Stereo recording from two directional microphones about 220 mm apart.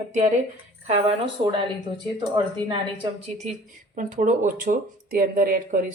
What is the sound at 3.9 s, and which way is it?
Speech, 35° right (ahead or behind).